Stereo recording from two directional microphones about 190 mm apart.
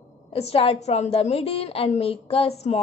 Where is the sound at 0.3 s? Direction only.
30° left (ahead or behind).